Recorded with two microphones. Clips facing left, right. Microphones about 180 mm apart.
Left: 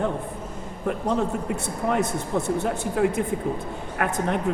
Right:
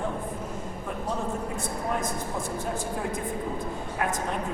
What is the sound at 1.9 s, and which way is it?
A man's voice, 70° left (ahead or behind).